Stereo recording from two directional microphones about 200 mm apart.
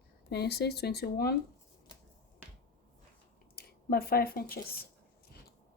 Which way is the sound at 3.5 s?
50° left (ahead or behind).